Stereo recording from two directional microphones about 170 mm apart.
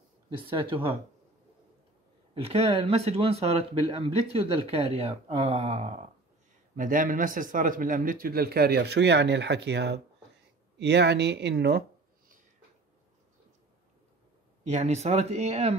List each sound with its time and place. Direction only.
0.3 s speech: 30° right (ahead or behind)
2.3 s speech: 35° right (ahead or behind)
6.8 s speech: 50° right (ahead or behind); by 11.8 s 75° right (ahead or behind)
14.6 s speech: 40° right (ahead or behind)